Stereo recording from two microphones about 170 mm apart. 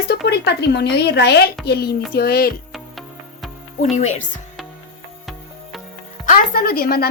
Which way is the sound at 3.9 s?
45° left (ahead or behind).